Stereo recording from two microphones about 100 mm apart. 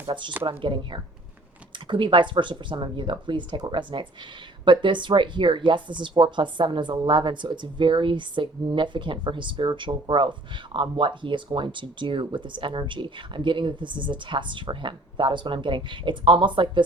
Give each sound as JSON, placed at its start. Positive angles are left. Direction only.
{"t": 0.0, "sound": "speech", "side_deg": -55}